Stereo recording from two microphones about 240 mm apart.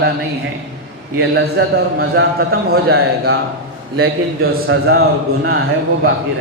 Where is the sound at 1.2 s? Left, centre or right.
Right.